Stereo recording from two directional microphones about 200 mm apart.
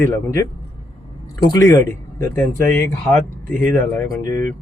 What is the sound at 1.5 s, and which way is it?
Speech, 15° left (ahead or behind).